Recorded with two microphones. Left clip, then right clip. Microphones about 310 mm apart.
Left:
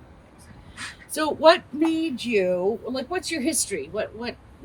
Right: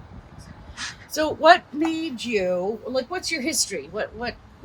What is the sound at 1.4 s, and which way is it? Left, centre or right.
Speech, centre.